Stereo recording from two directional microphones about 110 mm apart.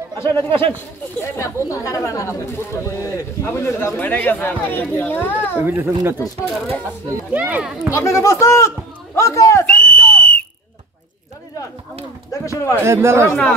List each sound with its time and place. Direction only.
0.2 s speech: 20° left (ahead or behind)
5.6 s speech: 20° right (ahead or behind)
7.2 s speech: 15° right (ahead or behind)
7.9 s speech: 30° left (ahead or behind)
9.7 s a sound: 10° left (ahead or behind)
12.3 s speech: 30° left (ahead or behind)
12.8 s speech: 25° right (ahead or behind)